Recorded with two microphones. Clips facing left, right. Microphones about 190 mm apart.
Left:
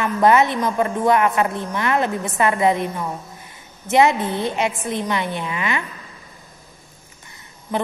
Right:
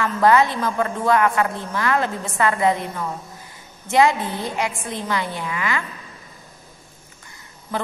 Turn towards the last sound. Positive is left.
turn(degrees=15)  # may be behind; listen again after turning